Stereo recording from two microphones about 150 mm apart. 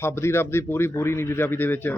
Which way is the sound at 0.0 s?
15° left (ahead or behind).